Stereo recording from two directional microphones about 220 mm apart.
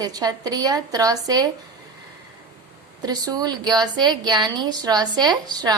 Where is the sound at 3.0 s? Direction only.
15° right (ahead or behind).